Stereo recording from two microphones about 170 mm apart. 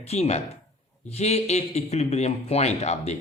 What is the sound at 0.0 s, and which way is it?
A man's voice, 40° left (ahead or behind).